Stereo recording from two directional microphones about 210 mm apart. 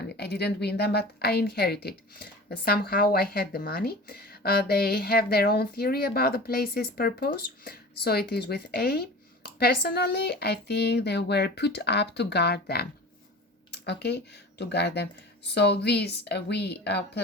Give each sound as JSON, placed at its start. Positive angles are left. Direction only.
{"t": 0.2, "sound": "a woman's voice", "side_deg": 50}
{"t": 13.7, "sound": "a sound", "side_deg": 50}
{"t": 14.6, "sound": "a woman's voice", "side_deg": 55}